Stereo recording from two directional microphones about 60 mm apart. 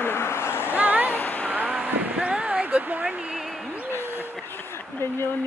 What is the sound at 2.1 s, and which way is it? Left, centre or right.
Speech, centre.